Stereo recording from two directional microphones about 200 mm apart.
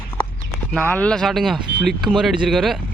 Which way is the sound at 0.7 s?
5° left (ahead or behind).